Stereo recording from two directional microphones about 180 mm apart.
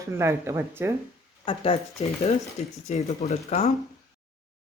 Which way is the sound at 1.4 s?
30° left (ahead or behind).